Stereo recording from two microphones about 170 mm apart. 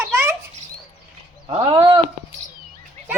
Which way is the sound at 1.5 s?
30° right (ahead or behind).